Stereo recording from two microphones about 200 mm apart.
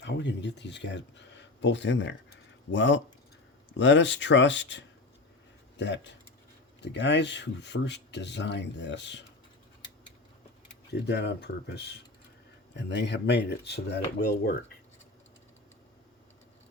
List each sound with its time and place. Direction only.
0.0 s speech: 60° left (ahead or behind)
11.0 s speech: 55° left (ahead or behind)